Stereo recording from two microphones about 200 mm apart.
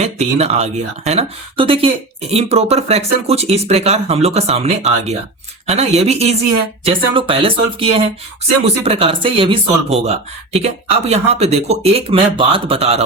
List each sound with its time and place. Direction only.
0.0 s speech: 35° right (ahead or behind)